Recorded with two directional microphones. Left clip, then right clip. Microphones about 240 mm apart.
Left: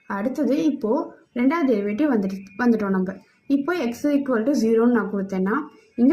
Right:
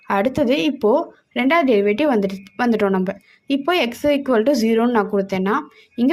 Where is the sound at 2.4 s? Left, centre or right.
Right.